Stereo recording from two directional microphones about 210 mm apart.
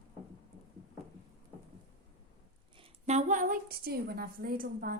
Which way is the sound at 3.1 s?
35° right (ahead or behind).